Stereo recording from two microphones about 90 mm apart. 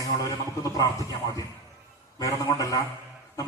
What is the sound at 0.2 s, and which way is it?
A man's voice, 40° left (ahead or behind).